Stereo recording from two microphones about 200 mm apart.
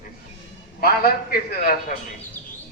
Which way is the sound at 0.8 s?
50° left (ahead or behind).